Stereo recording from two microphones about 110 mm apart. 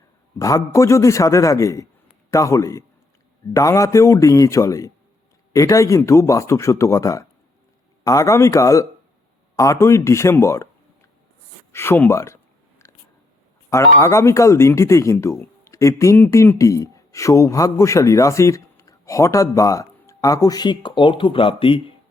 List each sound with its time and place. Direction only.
0.3 s a man's voice: 30° left (ahead or behind)
11.7 s a man's voice: 20° left (ahead or behind)
12.8 s whispering: 25° left (ahead or behind)
13.7 s a man's voice: 25° left (ahead or behind); by 21.8 s 55° left (ahead or behind)